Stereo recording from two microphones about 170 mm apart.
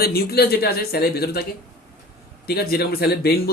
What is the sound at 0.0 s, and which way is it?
Speech, 65° left (ahead or behind).